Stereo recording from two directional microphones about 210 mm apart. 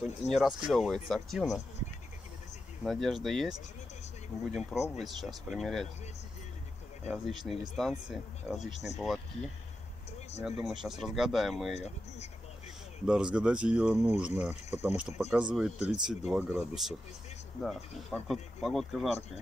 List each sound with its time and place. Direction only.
0.3 s speech: 5° right (ahead or behind)
2.8 s speech: centre (ahead or behind)
4.6 s speech: centre (ahead or behind)
7.1 s speech: centre (ahead or behind)
10.6 s speech: centre (ahead or behind)
11.7 s speech: 30° left (ahead or behind)
13.0 s speech: 5° right (ahead or behind)